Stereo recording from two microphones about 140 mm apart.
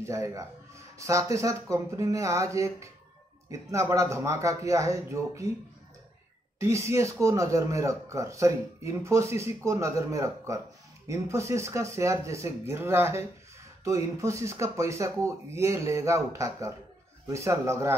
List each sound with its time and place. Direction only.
0.0 s speech: 20° right (ahead or behind)
6.6 s speech: 20° right (ahead or behind)